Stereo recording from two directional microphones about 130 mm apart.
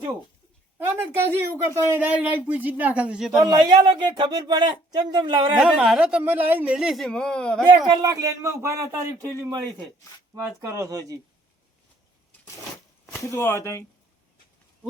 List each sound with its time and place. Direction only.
0.9 s speech: 20° right (ahead or behind)
3.3 s speech: 30° right (ahead or behind)
5.5 s speech: 5° right (ahead or behind)
7.8 s speech: 30° right (ahead or behind)
10.6 s speech: 25° right (ahead or behind)
13.3 s speech: 20° left (ahead or behind)